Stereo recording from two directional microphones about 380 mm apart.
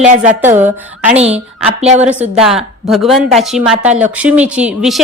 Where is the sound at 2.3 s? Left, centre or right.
Centre.